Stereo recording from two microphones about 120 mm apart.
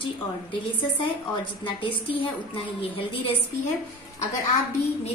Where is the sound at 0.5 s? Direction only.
45° left (ahead or behind).